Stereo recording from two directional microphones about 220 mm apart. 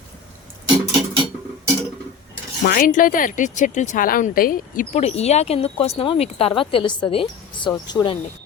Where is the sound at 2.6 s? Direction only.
40° left (ahead or behind); by 8.1 s 20° left (ahead or behind).